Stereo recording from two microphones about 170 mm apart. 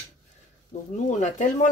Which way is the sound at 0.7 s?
45° left (ahead or behind).